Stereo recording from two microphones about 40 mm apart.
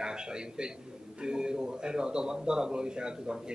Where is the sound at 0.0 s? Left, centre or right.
Centre.